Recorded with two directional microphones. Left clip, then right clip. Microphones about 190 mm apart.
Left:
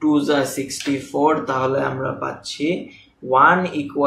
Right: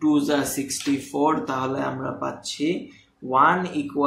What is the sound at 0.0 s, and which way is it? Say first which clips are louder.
Speech: left 4 dB; 40° right (ahead or behind).